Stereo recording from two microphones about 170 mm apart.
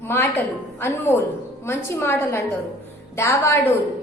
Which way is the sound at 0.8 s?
15° left (ahead or behind).